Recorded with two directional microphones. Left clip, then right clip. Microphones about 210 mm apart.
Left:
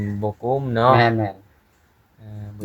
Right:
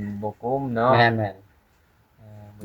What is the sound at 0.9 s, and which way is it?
Speech, 20° right (ahead or behind).